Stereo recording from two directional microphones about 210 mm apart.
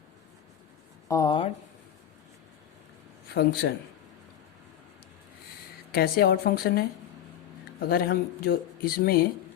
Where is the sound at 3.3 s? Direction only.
50° left (ahead or behind).